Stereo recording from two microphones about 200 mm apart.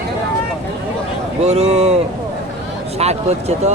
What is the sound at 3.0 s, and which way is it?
Speech, 35° right (ahead or behind).